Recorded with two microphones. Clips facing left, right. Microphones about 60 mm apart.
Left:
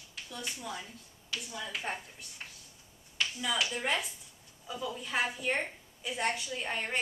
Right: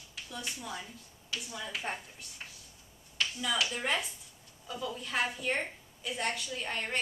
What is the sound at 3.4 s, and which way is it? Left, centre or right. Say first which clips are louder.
A woman's voice: even; centre.